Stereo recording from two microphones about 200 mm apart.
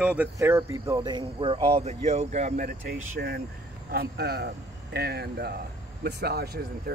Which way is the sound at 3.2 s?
55° right (ahead or behind).